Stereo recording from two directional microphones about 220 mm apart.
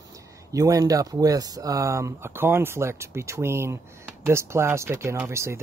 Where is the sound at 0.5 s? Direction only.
15° right (ahead or behind).